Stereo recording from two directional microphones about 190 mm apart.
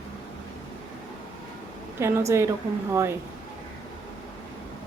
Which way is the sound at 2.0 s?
15° right (ahead or behind).